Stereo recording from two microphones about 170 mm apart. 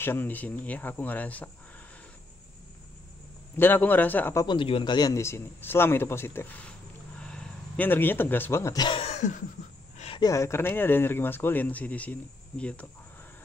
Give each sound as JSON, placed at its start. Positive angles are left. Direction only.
{"t": 0.0, "sound": "speech", "side_deg": 10}
{"t": 3.5, "sound": "speech", "side_deg": 10}
{"t": 4.5, "sound": "a man's voice", "side_deg": 30}
{"t": 9.9, "sound": "a sound", "side_deg": 35}
{"t": 10.2, "sound": "speech", "side_deg": 15}